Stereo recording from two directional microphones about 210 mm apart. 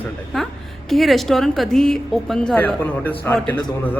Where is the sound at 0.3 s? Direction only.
5° left (ahead or behind).